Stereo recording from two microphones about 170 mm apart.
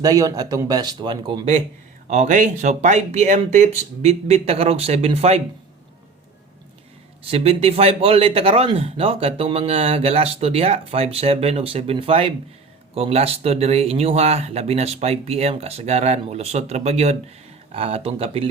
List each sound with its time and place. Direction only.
0.0 s speech: 20° right (ahead or behind)
2.0 s speech: 45° right (ahead or behind)
7.3 s speech: 35° right (ahead or behind)